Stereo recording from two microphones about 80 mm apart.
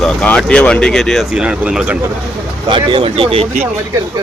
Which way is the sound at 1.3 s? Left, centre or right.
Centre.